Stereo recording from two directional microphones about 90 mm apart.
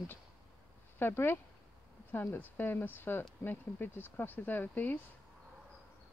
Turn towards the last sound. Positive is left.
turn(degrees=20)  # may be behind; listen again after turning